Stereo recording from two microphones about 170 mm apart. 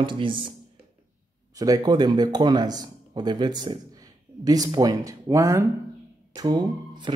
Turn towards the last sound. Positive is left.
turn(degrees=-25)  # may be behind; listen again after turning